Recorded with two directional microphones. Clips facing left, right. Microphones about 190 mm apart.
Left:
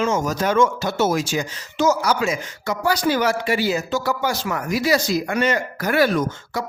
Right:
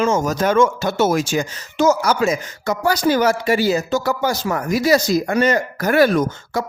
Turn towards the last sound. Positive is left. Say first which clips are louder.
# right 3 dB
turn(degrees=-45)  # may be behind; listen again after turning